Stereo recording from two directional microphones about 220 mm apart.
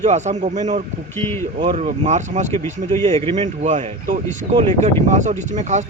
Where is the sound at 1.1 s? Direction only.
10° left (ahead or behind).